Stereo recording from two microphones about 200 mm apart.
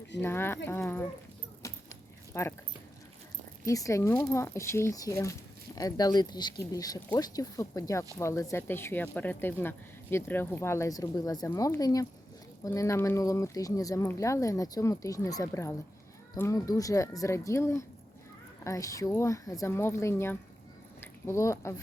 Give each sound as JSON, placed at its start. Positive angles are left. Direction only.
{"t": 0.2, "sound": "speech", "side_deg": 10}
{"t": 1.6, "sound": "keys jangling", "side_deg": 15}
{"t": 2.3, "sound": "speech", "side_deg": 15}
{"t": 3.7, "sound": "speech", "side_deg": 15}